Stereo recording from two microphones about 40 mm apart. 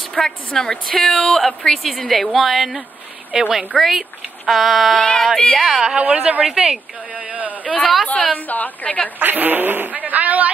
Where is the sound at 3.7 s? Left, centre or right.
Centre.